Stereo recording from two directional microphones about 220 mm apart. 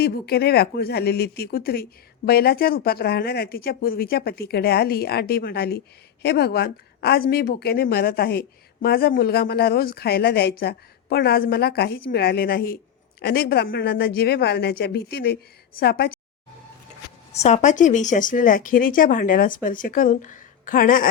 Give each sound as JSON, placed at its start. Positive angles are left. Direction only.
{"t": 0.0, "sound": "speech", "side_deg": 45}
{"t": 17.3, "sound": "speech", "side_deg": 30}